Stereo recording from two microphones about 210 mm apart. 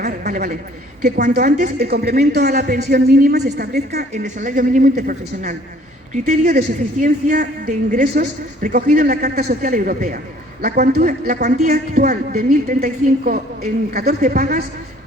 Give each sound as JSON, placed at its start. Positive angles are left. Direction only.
{"t": 0.0, "sound": "a woman's voice", "side_deg": -40}
{"t": 4.1, "sound": "a woman's voice", "side_deg": -35}